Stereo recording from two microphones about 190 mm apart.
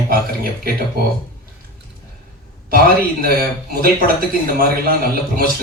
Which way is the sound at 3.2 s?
50° right (ahead or behind).